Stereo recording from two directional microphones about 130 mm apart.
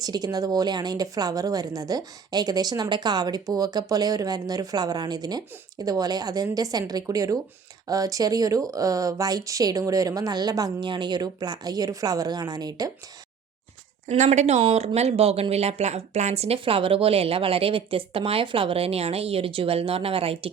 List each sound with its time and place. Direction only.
0.0 s a woman's voice: 30° right (ahead or behind)
14.1 s speech: 60° right (ahead or behind)